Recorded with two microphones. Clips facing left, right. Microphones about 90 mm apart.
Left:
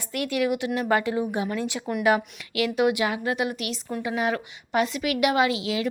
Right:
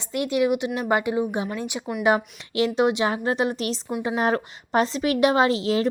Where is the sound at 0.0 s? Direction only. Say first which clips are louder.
Right 3 dB; 20° right (ahead or behind).